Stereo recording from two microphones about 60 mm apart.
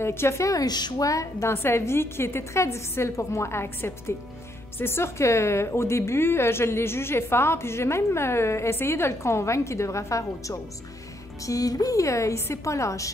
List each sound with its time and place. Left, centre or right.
0.0 s a woman's voice: left
0.5 s a woman's voice: left
1.5 s a woman's voice: left
11.4 s a woman's voice: left